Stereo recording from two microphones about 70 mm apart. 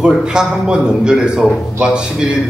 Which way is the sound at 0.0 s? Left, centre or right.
Centre.